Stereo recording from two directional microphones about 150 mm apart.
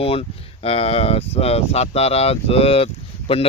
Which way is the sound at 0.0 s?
40° left (ahead or behind).